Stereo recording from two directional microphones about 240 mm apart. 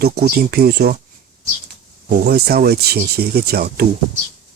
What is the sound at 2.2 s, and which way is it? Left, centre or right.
Speech, right.